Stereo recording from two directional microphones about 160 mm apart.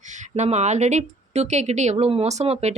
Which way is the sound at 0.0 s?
50° right (ahead or behind).